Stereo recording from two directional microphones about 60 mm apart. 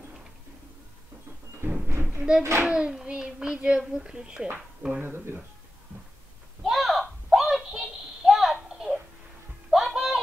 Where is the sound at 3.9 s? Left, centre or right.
Centre.